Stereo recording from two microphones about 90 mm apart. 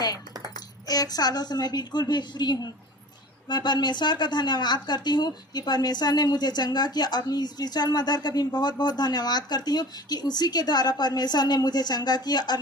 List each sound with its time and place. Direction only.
0.5 s speech: 45° left (ahead or behind)